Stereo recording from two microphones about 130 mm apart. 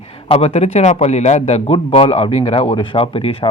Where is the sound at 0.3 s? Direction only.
50° left (ahead or behind).